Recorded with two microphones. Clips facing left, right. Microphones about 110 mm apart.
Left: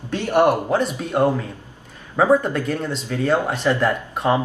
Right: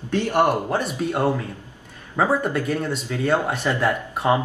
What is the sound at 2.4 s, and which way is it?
Speech, 10° right (ahead or behind).